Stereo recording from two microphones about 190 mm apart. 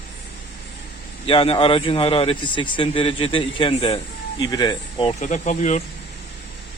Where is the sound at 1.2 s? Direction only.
30° left (ahead or behind).